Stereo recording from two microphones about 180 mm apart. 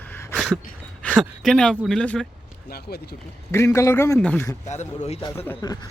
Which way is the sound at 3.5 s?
15° left (ahead or behind).